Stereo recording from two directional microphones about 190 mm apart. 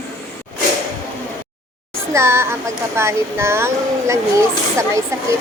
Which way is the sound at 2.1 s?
15° right (ahead or behind).